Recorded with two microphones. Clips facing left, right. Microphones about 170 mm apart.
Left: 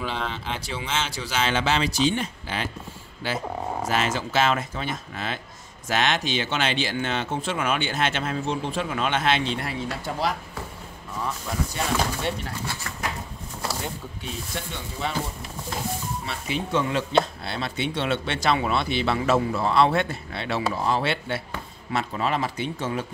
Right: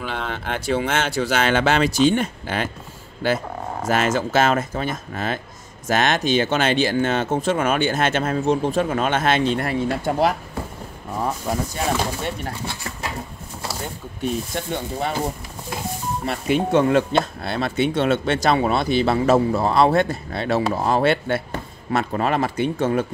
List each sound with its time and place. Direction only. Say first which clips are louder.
0.3 s speech: right 8 dB; 55° right (ahead or behind)
11.1 s music: right 6 dB; 45° right (ahead or behind)
14.2 s speech: right 11 dB; 50° right (ahead or behind)